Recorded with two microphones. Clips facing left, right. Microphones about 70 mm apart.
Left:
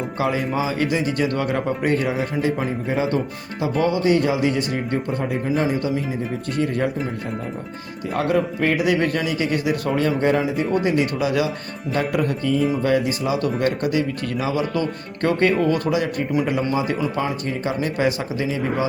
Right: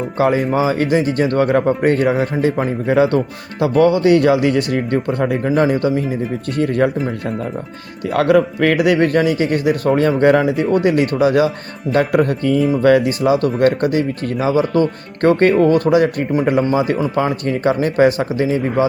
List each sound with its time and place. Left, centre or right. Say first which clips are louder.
0.2 s a man's voice: right 7 dB; right
8.1 s a man's voice: right 7 dB; right
10.8 s a man's voice: right 6 dB; right